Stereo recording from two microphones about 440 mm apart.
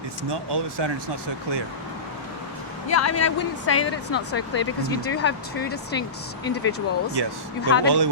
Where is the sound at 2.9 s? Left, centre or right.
Left.